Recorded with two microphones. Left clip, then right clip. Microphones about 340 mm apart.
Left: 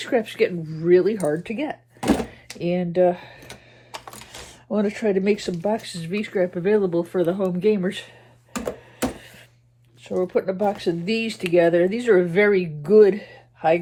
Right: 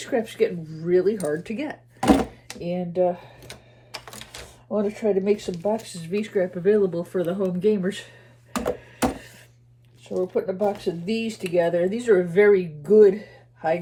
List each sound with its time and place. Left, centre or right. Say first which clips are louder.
0.0 s speech: left 2 dB; centre
2.0 s a sound: right 4 dB; centre
2.6 s typing: left 4 dB; centre
4.7 s speech: left 1 dB; left
8.5 s computer keyboard: right 3 dB; centre
10.0 s speech: left 2 dB; left